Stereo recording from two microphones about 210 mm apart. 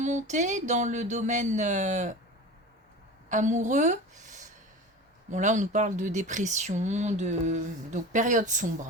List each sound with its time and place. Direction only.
0.0 s speech: 35° right (ahead or behind)
3.2 s speech: 35° right (ahead or behind)
5.3 s speech: 35° right (ahead or behind)